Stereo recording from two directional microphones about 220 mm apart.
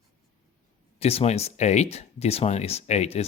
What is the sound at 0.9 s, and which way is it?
Speech, 30° left (ahead or behind).